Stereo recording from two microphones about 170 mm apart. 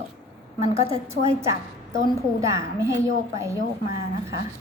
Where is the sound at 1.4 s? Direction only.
20° right (ahead or behind).